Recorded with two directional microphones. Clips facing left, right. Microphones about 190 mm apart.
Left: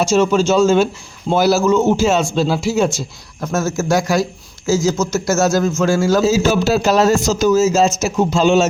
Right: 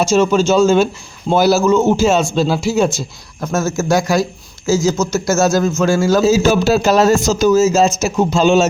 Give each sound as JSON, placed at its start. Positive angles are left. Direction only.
{"t": 0.0, "sound": "a man's voice", "side_deg": -30}
{"t": 3.4, "sound": "a man's voice", "side_deg": -25}
{"t": 6.2, "sound": "a man's voice", "side_deg": -50}